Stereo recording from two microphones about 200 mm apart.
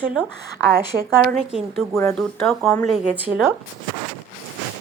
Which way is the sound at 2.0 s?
15° left (ahead or behind).